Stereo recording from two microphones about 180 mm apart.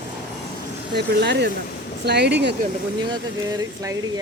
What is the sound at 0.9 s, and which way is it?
Speech, 70° right (ahead or behind).